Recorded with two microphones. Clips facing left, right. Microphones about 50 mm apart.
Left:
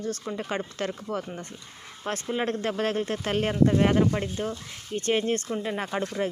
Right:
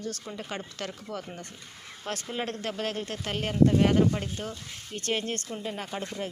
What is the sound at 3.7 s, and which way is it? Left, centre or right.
Speech, left.